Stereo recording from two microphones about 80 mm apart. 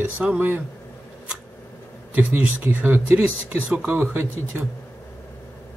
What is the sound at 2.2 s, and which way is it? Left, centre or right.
Speech, right.